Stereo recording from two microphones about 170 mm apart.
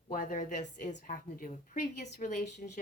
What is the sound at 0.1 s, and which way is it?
Speech, 50° left (ahead or behind).